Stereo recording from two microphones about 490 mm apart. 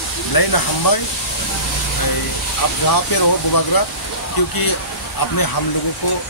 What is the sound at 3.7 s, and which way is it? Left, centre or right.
Speech, left.